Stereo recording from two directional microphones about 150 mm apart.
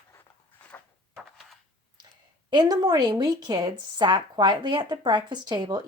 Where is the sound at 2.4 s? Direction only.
30° right (ahead or behind).